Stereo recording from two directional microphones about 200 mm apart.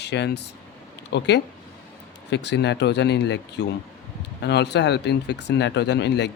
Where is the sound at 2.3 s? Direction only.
60° left (ahead or behind).